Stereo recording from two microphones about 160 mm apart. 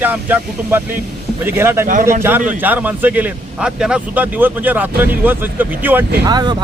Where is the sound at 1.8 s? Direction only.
60° right (ahead or behind).